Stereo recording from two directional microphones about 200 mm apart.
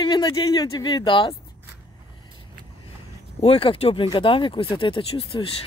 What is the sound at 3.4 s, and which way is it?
Speech, 30° left (ahead or behind).